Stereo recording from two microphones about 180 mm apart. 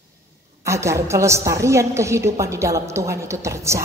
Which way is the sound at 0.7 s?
15° right (ahead or behind).